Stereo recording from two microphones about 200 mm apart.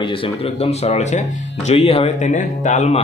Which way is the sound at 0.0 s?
25° left (ahead or behind).